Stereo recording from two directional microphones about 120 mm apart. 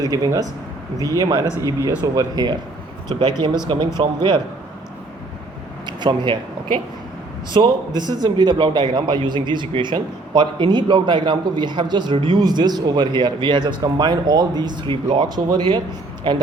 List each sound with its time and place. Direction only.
0.0 s a man's voice: 30° right (ahead or behind)
5.8 s a sound: 40° right (ahead or behind)
7.5 s a man's voice: 40° right (ahead or behind)